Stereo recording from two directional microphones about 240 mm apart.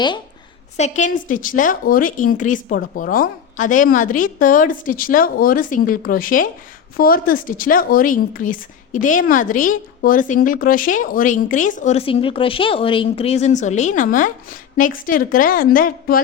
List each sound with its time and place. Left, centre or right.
0.8 s a woman's voice: left